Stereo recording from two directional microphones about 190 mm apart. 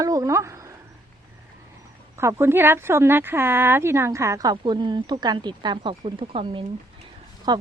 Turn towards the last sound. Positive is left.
turn(degrees=-20)  # may be behind; listen again after turning